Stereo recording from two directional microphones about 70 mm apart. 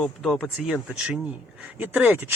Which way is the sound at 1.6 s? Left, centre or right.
Right.